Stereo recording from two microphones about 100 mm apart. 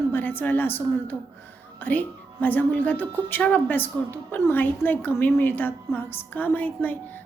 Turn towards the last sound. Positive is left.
turn(degrees=20)  # may be behind; listen again after turning